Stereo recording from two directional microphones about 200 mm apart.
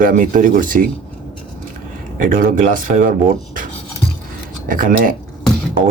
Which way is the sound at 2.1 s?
45° right (ahead or behind).